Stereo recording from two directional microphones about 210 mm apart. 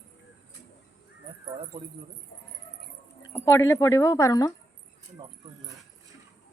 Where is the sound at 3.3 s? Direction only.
10° left (ahead or behind).